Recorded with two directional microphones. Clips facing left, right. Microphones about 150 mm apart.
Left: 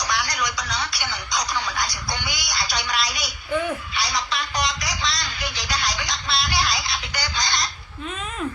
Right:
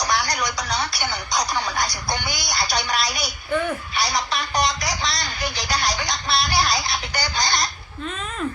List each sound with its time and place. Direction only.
0.0 s a man's voice: 40° right (ahead or behind)